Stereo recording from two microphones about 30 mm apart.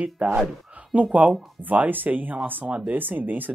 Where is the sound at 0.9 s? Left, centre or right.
Right.